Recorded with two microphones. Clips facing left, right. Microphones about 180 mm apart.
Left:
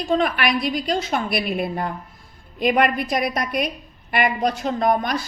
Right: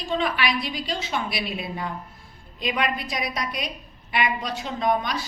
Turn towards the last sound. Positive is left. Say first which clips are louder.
# left 4 dB
turn(degrees=50)  # may be behind; listen again after turning